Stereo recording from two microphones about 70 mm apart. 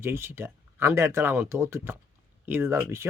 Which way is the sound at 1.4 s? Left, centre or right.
Right.